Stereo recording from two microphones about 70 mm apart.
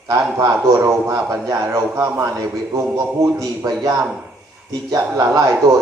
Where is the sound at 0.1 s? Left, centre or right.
Right.